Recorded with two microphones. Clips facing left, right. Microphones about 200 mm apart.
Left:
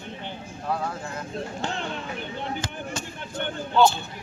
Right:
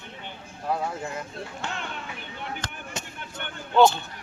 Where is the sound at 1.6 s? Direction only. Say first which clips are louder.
Left 3 dB; 35° left (ahead or behind).